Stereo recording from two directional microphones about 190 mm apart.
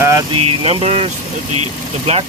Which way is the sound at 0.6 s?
30° right (ahead or behind).